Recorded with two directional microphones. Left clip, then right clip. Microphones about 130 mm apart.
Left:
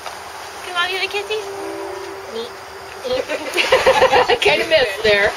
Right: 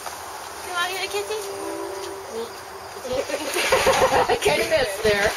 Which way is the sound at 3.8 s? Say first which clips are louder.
Left 6 dB; 30° left (ahead or behind).